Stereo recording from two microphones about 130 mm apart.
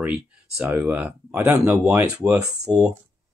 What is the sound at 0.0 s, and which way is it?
Speech, 5° right (ahead or behind).